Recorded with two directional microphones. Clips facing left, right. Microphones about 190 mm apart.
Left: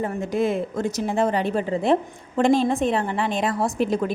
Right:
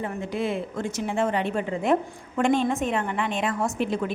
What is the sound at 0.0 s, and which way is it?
A woman's voice, 45° left (ahead or behind).